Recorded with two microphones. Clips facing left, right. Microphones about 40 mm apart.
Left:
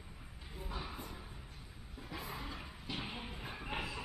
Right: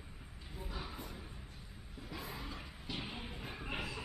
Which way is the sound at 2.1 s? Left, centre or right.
Centre.